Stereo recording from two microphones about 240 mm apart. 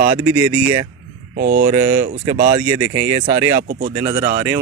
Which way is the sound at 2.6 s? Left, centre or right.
Centre.